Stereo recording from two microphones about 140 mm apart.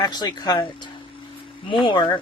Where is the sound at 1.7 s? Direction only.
35° left (ahead or behind).